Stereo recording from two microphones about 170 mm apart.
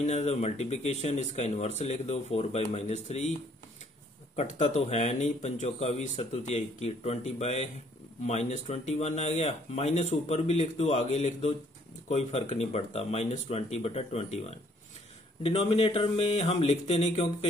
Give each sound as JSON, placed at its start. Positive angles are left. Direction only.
{"t": 0.0, "sound": "speech", "side_deg": 40}
{"t": 4.4, "sound": "speech", "side_deg": 45}